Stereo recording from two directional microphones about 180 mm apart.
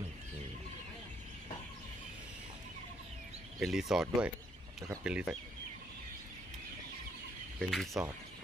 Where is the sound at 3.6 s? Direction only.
Centre (ahead or behind).